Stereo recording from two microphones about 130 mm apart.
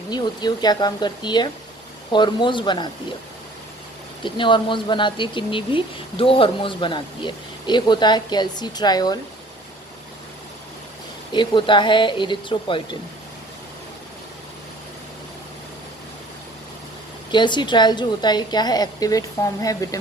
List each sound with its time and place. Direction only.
0.1 s speech: 30° left (ahead or behind)
4.2 s speech: 40° left (ahead or behind)
11.3 s speech: 40° left (ahead or behind)
17.3 s speech: 35° left (ahead or behind)